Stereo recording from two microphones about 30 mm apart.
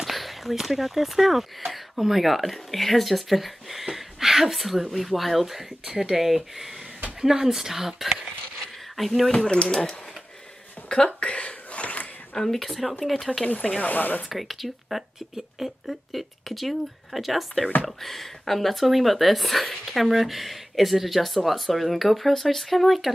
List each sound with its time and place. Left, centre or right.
0.1 s speech: centre
3.9 s a sound: centre
4.8 s speech: centre
9.3 s speech: left
10.9 s a sound: left
12.4 s speech: centre
13.7 s speech: left
14.3 s speech: centre